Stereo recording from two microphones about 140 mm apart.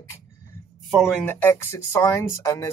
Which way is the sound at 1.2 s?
15° left (ahead or behind).